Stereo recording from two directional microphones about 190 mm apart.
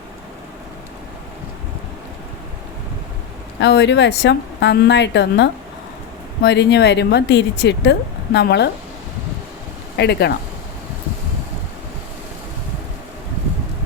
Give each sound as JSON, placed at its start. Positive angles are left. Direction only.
{"t": 3.6, "sound": "speech", "side_deg": 65}
{"t": 10.0, "sound": "speech", "side_deg": 60}